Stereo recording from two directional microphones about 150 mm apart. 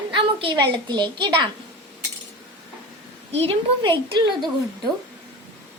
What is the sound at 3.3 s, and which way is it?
Speech, 40° right (ahead or behind).